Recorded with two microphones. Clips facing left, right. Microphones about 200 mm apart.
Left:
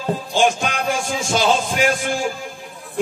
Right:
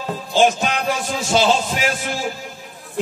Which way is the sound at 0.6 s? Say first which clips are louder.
Right 1 dB; 50° left (ahead or behind).